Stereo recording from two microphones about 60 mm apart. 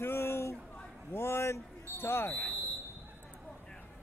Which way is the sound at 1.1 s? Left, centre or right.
Left.